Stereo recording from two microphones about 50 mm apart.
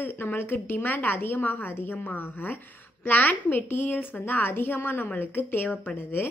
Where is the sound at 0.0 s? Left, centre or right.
Left.